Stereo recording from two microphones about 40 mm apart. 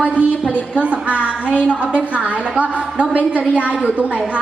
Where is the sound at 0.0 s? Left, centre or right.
Right.